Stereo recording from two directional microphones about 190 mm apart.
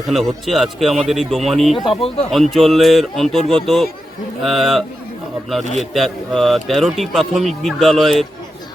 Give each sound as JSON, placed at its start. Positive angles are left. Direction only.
{"t": 0.1, "sound": "speech", "side_deg": 0}
{"t": 1.8, "sound": "speech", "side_deg": 25}
{"t": 2.3, "sound": "speech", "side_deg": 0}
{"t": 5.9, "sound": "speech", "side_deg": 0}